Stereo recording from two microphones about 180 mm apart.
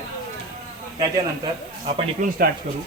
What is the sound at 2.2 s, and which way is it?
Speech, 45° right (ahead or behind).